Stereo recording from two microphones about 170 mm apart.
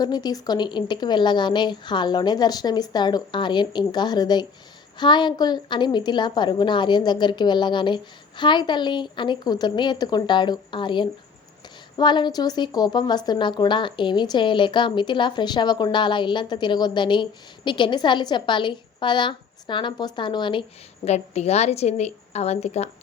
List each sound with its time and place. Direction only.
0.0 s a woman's voice: 25° left (ahead or behind); by 22.9 s 40° left (ahead or behind)